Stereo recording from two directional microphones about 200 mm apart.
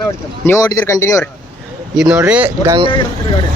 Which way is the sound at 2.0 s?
5° right (ahead or behind).